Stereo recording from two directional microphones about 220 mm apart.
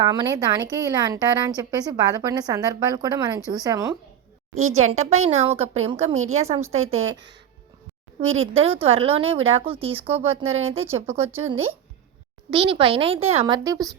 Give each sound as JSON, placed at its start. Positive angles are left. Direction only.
{"t": 0.1, "sound": "a woman's voice", "side_deg": -20}
{"t": 4.7, "sound": "a woman's voice", "side_deg": -30}
{"t": 8.2, "sound": "a woman's voice", "side_deg": -25}
{"t": 11.3, "sound": "a woman's voice", "side_deg": -10}
{"t": 12.5, "sound": "a woman's voice", "side_deg": -25}
{"t": 13.7, "sound": "a woman's voice", "side_deg": -15}